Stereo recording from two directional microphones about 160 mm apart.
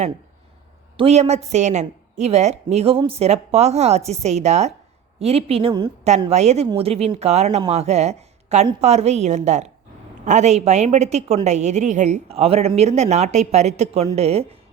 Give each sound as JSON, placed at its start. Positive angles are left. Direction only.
{"t": 0.9, "sound": "a woman's voice", "side_deg": -40}
{"t": 6.1, "sound": "a woman's voice", "side_deg": -45}